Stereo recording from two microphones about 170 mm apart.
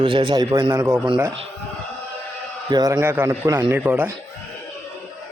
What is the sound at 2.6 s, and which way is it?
A man's voice, 25° right (ahead or behind).